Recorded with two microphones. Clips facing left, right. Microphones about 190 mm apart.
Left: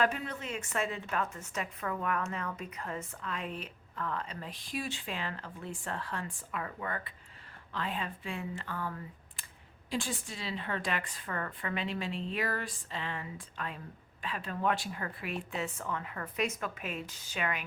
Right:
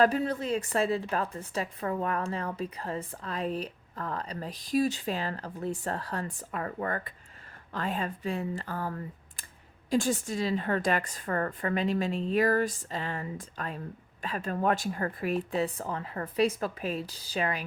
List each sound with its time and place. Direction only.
0.0 s a woman's voice: 35° right (ahead or behind)